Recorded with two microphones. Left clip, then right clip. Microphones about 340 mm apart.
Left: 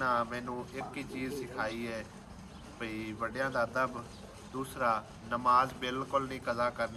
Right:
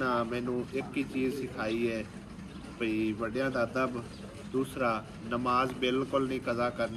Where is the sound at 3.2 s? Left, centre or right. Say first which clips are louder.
Right 2 dB; centre.